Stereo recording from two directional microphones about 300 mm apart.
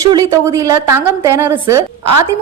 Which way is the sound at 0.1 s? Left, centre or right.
Centre.